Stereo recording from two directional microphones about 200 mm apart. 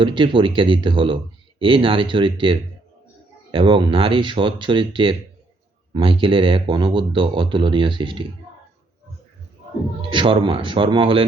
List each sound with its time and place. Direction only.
0.0 s speech: 25° right (ahead or behind)
10.1 s speech: 25° right (ahead or behind)